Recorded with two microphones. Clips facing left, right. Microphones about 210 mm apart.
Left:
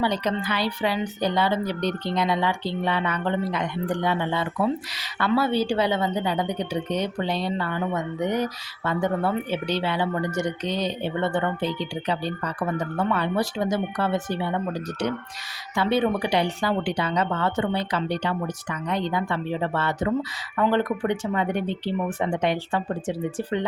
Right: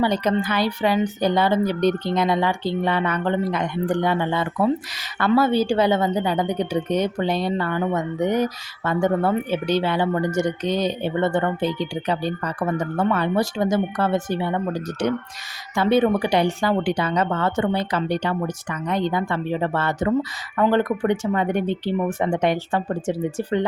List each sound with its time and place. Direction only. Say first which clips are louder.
0.0 s speech: right 4 dB; 50° right (ahead or behind)
15.7 s speech: right 4 dB; 45° right (ahead or behind)